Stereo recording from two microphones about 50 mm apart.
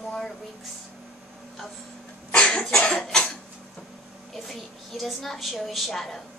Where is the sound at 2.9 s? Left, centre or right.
Centre.